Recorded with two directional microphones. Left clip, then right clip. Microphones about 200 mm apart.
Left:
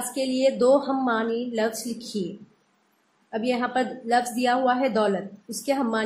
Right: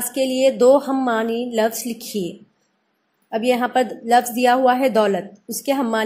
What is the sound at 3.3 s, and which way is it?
A woman's voice, 30° right (ahead or behind).